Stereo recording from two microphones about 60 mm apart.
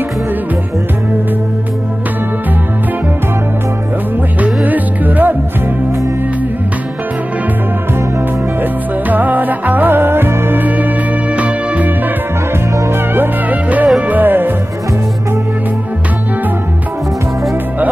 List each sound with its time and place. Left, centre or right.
4.6 s music: right
9.1 s music: right
12.9 s music: right